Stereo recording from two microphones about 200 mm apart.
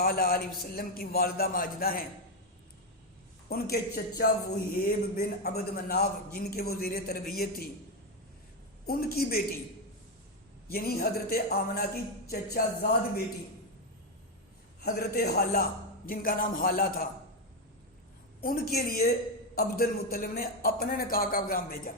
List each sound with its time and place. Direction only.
0.0 s a man's voice: 50° left (ahead or behind)
3.5 s a man's voice: 50° left (ahead or behind)
8.9 s a man's voice: 50° left (ahead or behind)
10.7 s a man's voice: 50° left (ahead or behind)
14.8 s a man's voice: 50° left (ahead or behind)
18.3 s a man's voice: 50° left (ahead or behind)